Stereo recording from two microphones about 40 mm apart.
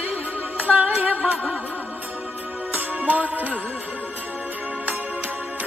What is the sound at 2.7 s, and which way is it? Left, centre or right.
Music, right.